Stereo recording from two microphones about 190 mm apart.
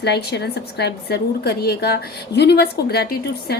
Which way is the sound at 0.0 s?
60° left (ahead or behind).